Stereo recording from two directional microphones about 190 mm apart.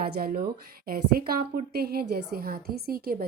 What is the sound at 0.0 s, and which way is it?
A woman's voice, 50° right (ahead or behind).